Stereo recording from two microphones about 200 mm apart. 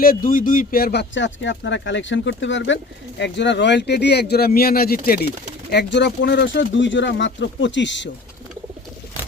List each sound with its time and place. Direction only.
0.0 s speech: 45° left (ahead or behind)
5.7 s speech: 60° left (ahead or behind)